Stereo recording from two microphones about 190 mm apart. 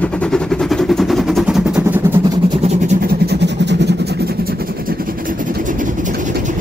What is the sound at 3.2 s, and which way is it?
Vehicle, 65° right (ahead or behind).